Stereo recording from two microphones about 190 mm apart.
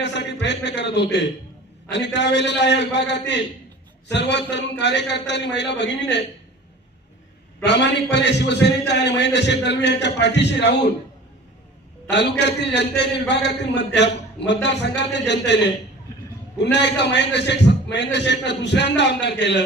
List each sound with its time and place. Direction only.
0.0 s a man's voice: 65° left (ahead or behind)
7.6 s a man's voice: 65° left (ahead or behind)
12.1 s a man's voice: 65° left (ahead or behind)